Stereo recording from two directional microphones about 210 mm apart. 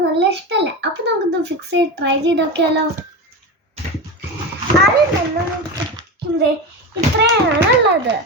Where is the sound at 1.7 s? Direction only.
55° right (ahead or behind).